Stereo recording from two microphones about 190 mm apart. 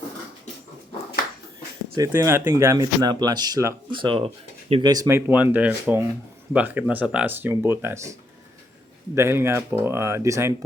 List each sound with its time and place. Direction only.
2.0 s speech: 15° right (ahead or behind)
9.1 s speech: 15° right (ahead or behind)